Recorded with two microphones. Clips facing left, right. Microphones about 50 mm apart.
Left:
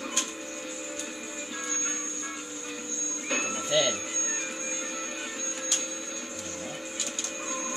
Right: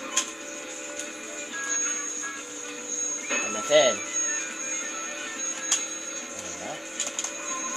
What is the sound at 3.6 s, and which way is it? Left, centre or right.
Music, right.